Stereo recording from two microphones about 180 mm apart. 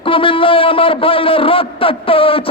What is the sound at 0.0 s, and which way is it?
A man's voice, 30° left (ahead or behind).